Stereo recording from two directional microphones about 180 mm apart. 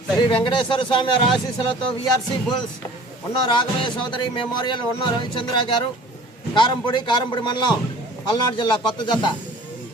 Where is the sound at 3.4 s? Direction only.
25° left (ahead or behind).